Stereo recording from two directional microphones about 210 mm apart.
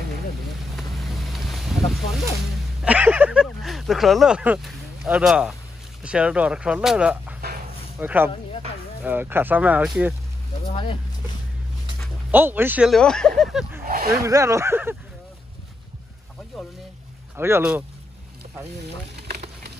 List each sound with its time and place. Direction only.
0.7 s boat: centre (ahead or behind)
2.8 s a sound: 5° right (ahead or behind)
6.0 s speech: 5° right (ahead or behind)
10.7 s speech: 25° left (ahead or behind)
12.0 s speech: 10° right (ahead or behind)
13.8 s a sound: 45° right (ahead or behind)
14.2 s speech: 15° right (ahead or behind)
17.4 s speech: 10° right (ahead or behind)